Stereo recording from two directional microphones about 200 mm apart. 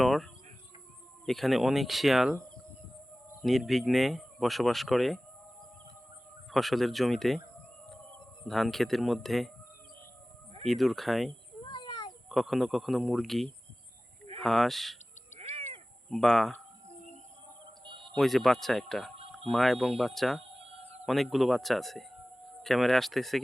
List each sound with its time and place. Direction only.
0.0 s chicken: centre (ahead or behind)
1.2 s speech: centre (ahead or behind)
3.4 s speech: centre (ahead or behind)
6.5 s speech: centre (ahead or behind)
8.4 s speech: centre (ahead or behind)
10.7 s speech: centre (ahead or behind)
11.6 s a sound: 20° left (ahead or behind)
12.3 s speech: centre (ahead or behind)
15.4 s crow: 30° right (ahead or behind)
16.0 s speech: centre (ahead or behind)
18.1 s speech: centre (ahead or behind)